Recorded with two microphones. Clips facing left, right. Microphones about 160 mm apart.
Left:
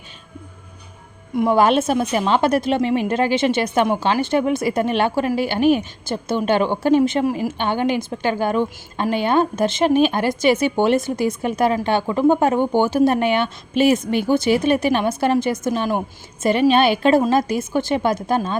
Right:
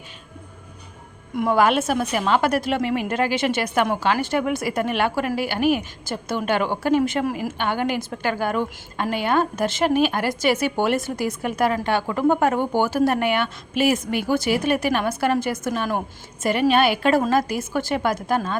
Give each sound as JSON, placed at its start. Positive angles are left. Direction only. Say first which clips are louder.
{"t": 1.5, "sound": "a woman's voice", "louder": "left 3 dB", "side_deg": 25}